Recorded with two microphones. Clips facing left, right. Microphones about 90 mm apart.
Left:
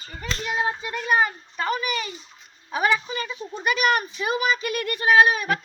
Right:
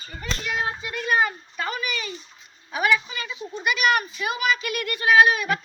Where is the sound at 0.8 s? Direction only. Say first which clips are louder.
Right 1 dB; 25° left (ahead or behind).